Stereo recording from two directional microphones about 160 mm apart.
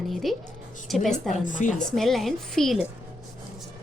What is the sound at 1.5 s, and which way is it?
Speech, 55° left (ahead or behind).